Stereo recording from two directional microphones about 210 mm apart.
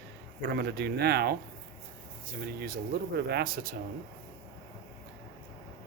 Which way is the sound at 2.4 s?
50° right (ahead or behind).